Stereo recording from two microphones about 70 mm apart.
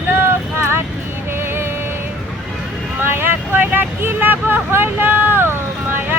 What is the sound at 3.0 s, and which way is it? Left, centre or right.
Vehicle, right.